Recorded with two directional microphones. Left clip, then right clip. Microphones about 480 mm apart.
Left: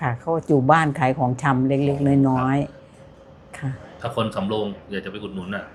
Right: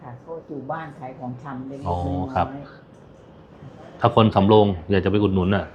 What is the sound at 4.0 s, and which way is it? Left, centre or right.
Speech, right.